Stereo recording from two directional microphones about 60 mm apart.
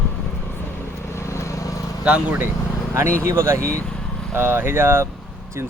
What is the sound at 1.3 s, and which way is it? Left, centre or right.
Vehicle, left.